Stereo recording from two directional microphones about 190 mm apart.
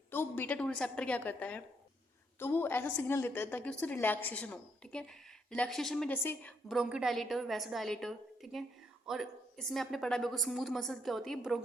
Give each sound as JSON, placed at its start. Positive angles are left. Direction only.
{"t": 0.1, "sound": "a woman's voice", "side_deg": 10}